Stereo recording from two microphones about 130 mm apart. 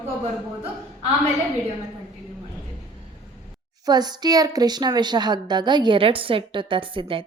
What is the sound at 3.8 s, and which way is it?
A woman's voice, 30° right (ahead or behind).